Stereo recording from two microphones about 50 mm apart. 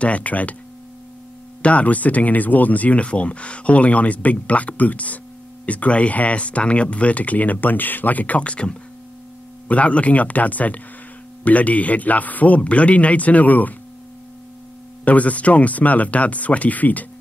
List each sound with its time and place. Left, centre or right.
0.0 s speech: left
1.6 s speech: left
15.0 s speech: left